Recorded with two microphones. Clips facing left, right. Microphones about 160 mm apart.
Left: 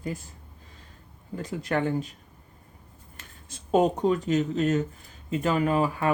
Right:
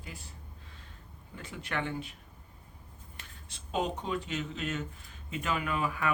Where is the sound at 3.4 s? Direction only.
45° left (ahead or behind).